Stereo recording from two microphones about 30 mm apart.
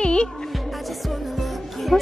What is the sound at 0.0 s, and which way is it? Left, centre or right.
Music, left.